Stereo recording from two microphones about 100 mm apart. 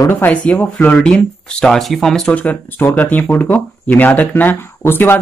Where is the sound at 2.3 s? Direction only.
15° left (ahead or behind).